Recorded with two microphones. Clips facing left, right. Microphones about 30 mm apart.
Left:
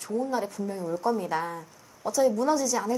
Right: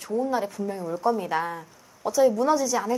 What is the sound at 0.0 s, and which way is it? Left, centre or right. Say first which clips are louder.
A woman's voice: right 3 dB; centre.